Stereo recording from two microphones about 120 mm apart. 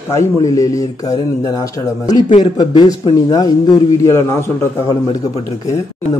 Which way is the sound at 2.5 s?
35° left (ahead or behind).